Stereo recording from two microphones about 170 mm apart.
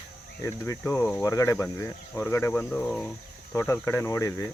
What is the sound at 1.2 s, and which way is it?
Speech, 20° left (ahead or behind).